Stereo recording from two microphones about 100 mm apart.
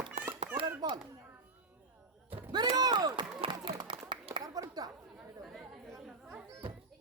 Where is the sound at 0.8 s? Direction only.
40° right (ahead or behind).